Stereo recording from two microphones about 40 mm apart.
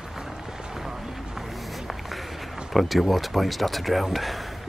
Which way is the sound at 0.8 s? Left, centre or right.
Centre.